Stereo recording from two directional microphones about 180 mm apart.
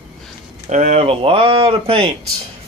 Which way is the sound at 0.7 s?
40° right (ahead or behind).